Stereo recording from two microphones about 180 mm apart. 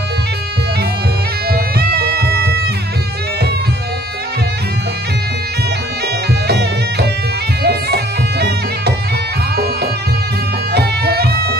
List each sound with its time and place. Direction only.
1.5 s music: 60° right (ahead or behind)
6.4 s music: 65° right (ahead or behind)
10.7 s music: 60° right (ahead or behind)